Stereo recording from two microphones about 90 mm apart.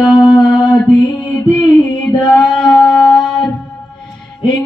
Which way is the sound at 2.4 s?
55° left (ahead or behind).